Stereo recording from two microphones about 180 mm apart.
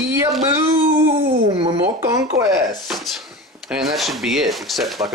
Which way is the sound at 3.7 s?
Centre (ahead or behind).